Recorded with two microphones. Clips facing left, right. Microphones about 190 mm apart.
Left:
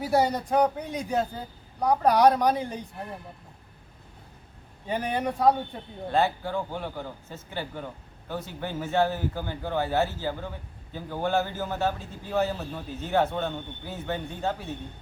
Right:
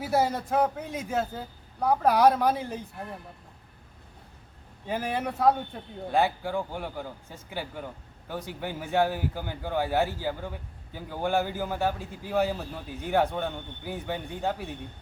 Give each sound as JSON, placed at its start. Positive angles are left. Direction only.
{"t": 0.0, "sound": "a man's voice", "side_deg": -5}
{"t": 4.9, "sound": "a man's voice", "side_deg": 0}
{"t": 6.1, "sound": "a man's voice", "side_deg": -10}